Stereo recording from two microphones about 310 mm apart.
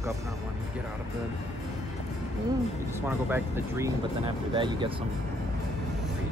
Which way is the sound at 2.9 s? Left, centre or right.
Centre.